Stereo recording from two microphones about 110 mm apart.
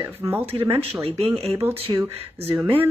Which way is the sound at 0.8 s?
60° right (ahead or behind).